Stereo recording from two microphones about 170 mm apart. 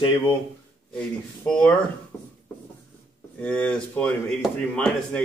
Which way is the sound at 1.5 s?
5° left (ahead or behind).